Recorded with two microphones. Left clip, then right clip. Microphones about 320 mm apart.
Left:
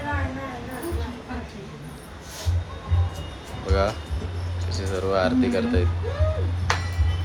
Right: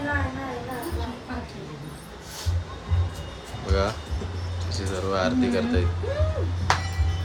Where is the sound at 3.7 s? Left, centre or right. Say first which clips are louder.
Left 2 dB; centre.